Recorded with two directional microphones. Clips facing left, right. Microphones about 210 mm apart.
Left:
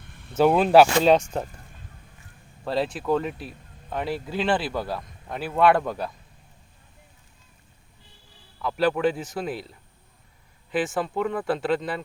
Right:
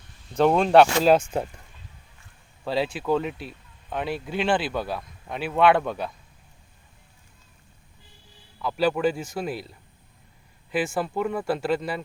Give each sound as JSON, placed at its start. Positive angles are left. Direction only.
{"t": 0.0, "sound": "vehicle", "side_deg": 60}
{"t": 0.3, "sound": "speech", "side_deg": 5}
{"t": 2.6, "sound": "speech", "side_deg": 0}
{"t": 8.5, "sound": "speech", "side_deg": 0}